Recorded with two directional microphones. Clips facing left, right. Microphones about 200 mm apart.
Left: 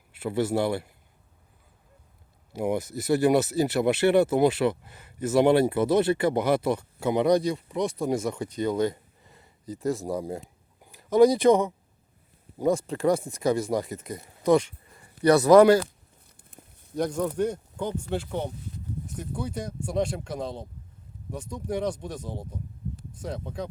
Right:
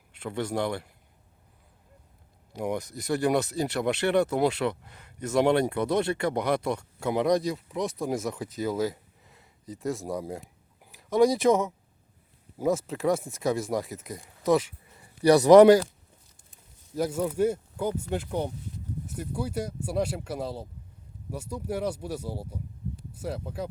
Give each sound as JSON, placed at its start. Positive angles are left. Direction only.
{"t": 0.1, "sound": "a man's voice", "side_deg": 5}
{"t": 2.5, "sound": "speech", "side_deg": 5}
{"t": 15.2, "sound": "speech", "side_deg": -15}
{"t": 16.4, "sound": "a sound", "side_deg": 60}
{"t": 16.9, "sound": "speech", "side_deg": -5}